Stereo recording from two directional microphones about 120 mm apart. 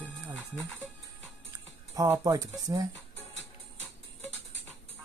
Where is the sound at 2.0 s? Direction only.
25° right (ahead or behind).